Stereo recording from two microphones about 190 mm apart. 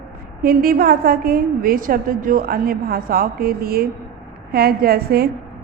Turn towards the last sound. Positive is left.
turn(degrees=-55)  # may be behind; listen again after turning